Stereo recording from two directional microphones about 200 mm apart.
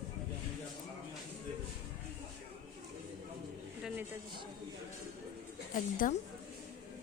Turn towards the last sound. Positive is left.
turn(degrees=40)  # may be behind; listen again after turning